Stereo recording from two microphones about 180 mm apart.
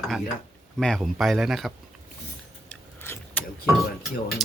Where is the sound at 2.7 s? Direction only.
10° left (ahead or behind).